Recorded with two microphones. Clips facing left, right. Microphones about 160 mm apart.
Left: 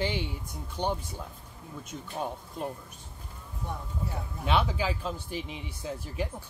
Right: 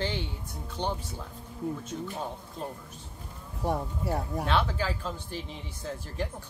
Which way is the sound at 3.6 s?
75° right (ahead or behind).